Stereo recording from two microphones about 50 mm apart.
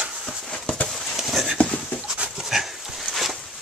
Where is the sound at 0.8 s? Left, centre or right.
Centre.